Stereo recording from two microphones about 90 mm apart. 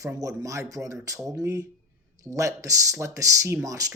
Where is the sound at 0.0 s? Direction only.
40° right (ahead or behind).